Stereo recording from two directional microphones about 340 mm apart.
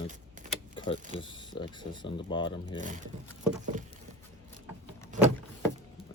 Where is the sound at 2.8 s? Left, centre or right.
Right.